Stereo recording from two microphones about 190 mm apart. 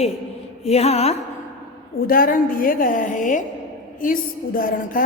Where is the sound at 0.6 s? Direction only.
35° left (ahead or behind).